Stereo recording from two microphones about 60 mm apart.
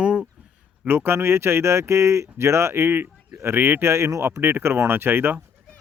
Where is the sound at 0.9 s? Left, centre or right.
Right.